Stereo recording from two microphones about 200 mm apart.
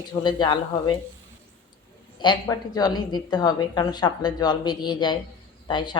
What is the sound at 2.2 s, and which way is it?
A woman's voice, 20° left (ahead or behind).